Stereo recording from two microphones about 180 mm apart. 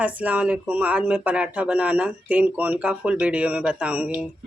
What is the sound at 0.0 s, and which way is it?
Speech, 10° right (ahead or behind).